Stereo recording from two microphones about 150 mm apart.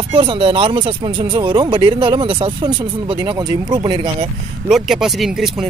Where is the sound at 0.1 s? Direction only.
30° right (ahead or behind).